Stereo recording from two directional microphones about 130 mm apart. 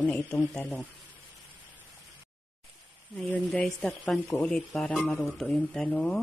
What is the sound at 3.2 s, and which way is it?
Speech, 10° left (ahead or behind).